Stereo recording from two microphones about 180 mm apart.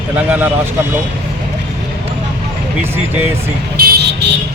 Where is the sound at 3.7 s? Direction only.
55° right (ahead or behind); by 4.3 s 70° right (ahead or behind).